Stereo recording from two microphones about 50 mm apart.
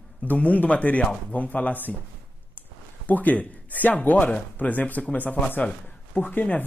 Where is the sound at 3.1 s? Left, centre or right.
Left.